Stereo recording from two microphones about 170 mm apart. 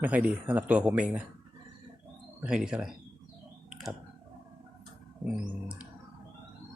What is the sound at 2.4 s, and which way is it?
Speech, 5° right (ahead or behind).